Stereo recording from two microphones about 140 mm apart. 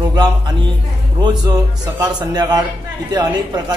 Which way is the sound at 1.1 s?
30° right (ahead or behind).